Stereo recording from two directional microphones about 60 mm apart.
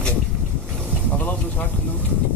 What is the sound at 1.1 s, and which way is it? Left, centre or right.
Vehicle, left.